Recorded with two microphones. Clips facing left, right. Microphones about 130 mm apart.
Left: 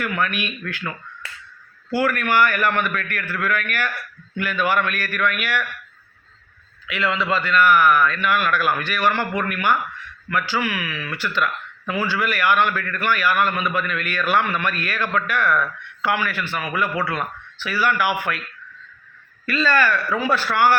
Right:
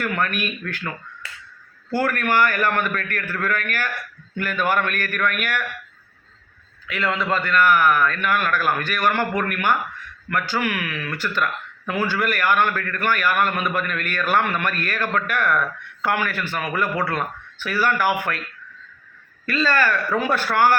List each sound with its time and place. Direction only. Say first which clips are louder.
0.0 s a man's voice: even; 45° right (ahead or behind)
2.0 s a man's voice: left 1 dB; 45° right (ahead or behind)
6.8 s a man's voice: left 1 dB; 45° right (ahead or behind)
19.5 s a man's voice: left 1 dB; 45° right (ahead or behind)